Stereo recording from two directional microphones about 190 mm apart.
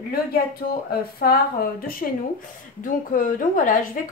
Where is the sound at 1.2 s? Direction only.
50° left (ahead or behind).